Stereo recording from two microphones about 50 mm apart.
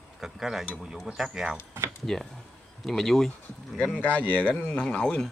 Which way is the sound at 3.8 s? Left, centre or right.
Left.